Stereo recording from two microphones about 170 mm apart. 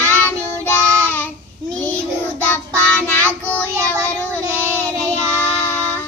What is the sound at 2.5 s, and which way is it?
Child singing, 10° left (ahead or behind).